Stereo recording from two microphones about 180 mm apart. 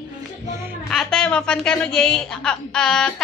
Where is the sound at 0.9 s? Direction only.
5° left (ahead or behind).